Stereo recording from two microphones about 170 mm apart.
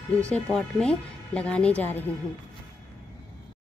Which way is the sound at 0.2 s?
5° left (ahead or behind).